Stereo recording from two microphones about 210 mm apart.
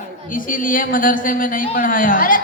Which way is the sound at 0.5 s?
40° left (ahead or behind).